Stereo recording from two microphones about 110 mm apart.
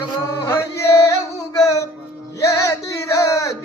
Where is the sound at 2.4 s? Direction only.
30° left (ahead or behind).